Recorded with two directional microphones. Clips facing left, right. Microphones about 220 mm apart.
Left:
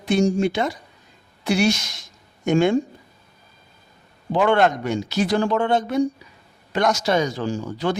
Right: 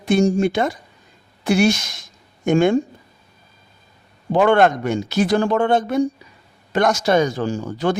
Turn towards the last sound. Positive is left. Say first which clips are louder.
# right 3 dB
turn(degrees=-45)  # may be behind; listen again after turning